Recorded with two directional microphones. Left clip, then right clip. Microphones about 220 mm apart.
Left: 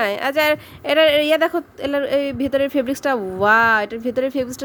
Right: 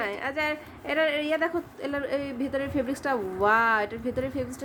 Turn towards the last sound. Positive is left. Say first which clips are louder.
# left 9 dB
turn(degrees=35)  # may be behind; listen again after turning